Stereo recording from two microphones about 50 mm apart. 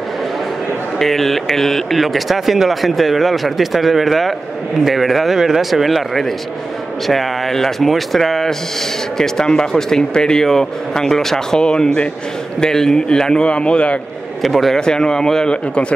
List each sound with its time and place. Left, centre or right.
0.9 s speech: centre; by 12.1 s left
12.5 s speech: centre
14.4 s speech: centre
14.8 s speech: centre
15.5 s speech: left